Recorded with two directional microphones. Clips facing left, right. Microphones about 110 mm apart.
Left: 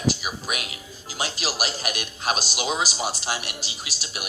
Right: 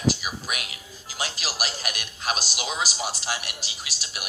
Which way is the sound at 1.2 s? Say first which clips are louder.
Left 3 dB; 25° left (ahead or behind).